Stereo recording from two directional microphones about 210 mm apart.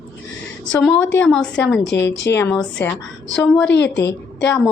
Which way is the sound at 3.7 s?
55° left (ahead or behind).